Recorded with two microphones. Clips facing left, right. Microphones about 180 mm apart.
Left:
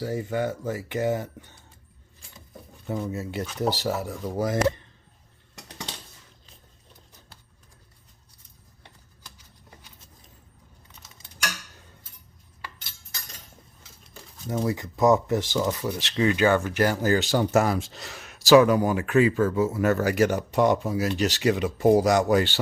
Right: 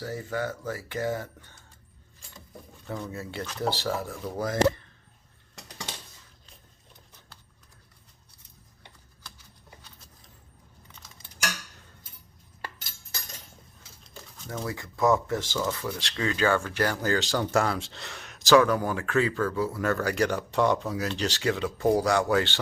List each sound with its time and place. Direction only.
0.0 s speech: 20° left (ahead or behind)
2.8 s speech: 20° left (ahead or behind)
3.4 s speech: 5° left (ahead or behind)
11.0 s a sound: 10° left (ahead or behind)
14.4 s speech: 15° left (ahead or behind)
18.0 s speech: centre (ahead or behind)
18.4 s speech: 15° left (ahead or behind)